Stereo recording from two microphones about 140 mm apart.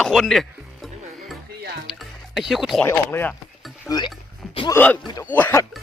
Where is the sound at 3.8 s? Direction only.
30° left (ahead or behind).